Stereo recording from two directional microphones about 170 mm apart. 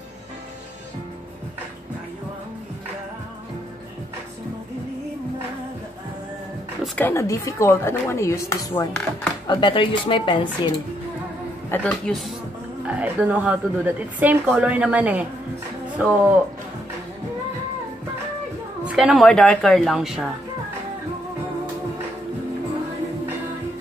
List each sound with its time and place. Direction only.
7.0 s speech: 15° left (ahead or behind)
9.5 s speech: 30° left (ahead or behind)
11.7 s speech: 10° left (ahead or behind)
12.8 s a woman's voice: 10° right (ahead or behind)
18.9 s a woman's voice: 5° right (ahead or behind)